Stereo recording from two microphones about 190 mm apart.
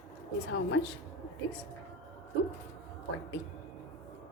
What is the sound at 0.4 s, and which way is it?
Speech, 90° left.